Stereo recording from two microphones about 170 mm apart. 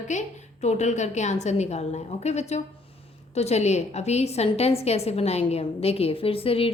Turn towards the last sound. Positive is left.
turn(degrees=35)  # may be behind; listen again after turning